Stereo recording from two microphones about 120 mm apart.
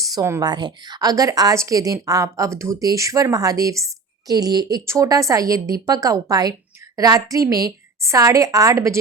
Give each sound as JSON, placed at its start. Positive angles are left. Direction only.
{"t": 0.0, "sound": "a woman's voice", "side_deg": -30}